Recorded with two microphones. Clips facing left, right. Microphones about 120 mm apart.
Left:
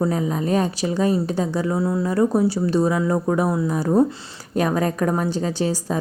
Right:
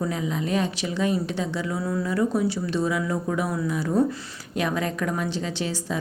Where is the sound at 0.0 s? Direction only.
40° left (ahead or behind).